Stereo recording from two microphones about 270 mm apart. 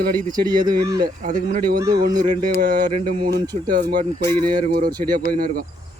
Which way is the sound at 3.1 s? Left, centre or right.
Right.